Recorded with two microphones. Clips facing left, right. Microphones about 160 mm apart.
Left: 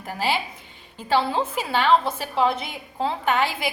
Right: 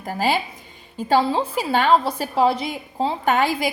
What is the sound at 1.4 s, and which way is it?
A woman's voice, 45° right (ahead or behind).